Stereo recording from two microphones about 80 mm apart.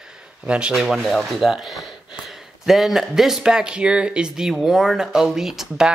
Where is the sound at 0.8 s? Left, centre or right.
Centre.